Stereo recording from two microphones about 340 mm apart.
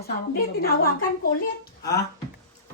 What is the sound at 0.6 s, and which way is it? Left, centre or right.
Speech, left.